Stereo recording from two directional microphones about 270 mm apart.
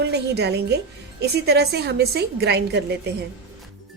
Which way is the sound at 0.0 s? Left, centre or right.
Right.